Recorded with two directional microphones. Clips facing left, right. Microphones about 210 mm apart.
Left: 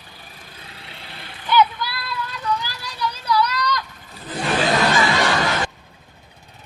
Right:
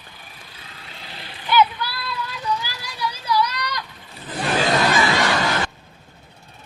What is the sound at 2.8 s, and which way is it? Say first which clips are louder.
Vehicle: left 2 dB; 10° right (ahead or behind).